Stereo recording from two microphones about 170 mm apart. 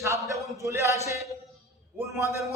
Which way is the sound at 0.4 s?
20° right (ahead or behind).